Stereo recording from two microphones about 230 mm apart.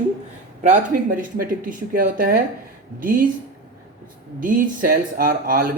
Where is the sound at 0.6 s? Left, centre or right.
Right.